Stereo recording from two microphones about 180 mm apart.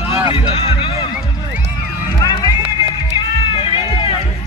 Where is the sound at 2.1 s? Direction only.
20° left (ahead or behind).